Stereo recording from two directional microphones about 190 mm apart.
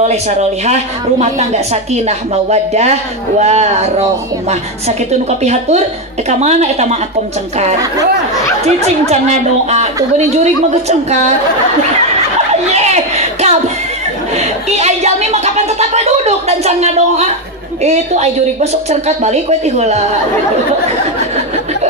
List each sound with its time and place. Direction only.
0.0 s speech: 35° right (ahead or behind)
5.4 s speech: 35° right (ahead or behind)
8.6 s speech: 35° right (ahead or behind)
12.7 s a sound: 35° right (ahead or behind)
14.3 s speech: 35° right (ahead or behind)